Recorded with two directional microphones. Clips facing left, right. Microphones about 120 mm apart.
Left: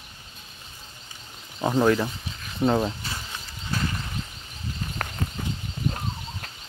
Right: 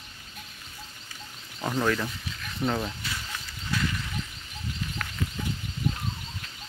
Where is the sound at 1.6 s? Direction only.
25° left (ahead or behind); by 5.3 s 45° left (ahead or behind).